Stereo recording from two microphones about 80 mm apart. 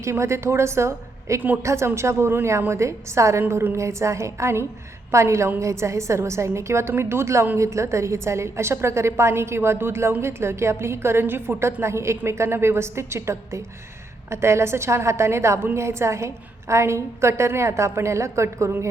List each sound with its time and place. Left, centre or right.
0.0 s a woman's voice: right